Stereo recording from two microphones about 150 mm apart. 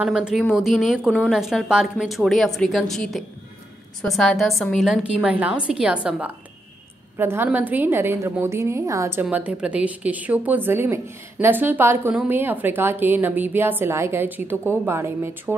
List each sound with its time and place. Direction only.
0.0 s a woman's voice: 5° right (ahead or behind)
9.2 s a woman's voice: 10° right (ahead or behind)